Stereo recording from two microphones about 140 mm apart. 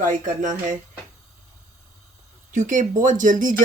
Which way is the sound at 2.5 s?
65° right (ahead or behind).